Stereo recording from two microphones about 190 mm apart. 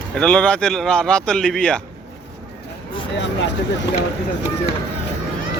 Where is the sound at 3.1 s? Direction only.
65° left (ahead or behind).